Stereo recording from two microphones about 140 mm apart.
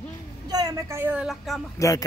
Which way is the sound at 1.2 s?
Centre (ahead or behind).